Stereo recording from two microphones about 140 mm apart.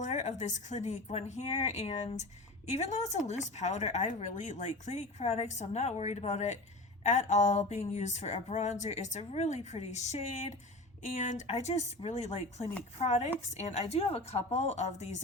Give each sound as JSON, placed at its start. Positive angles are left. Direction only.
{"t": 0.0, "sound": "speech", "side_deg": 60}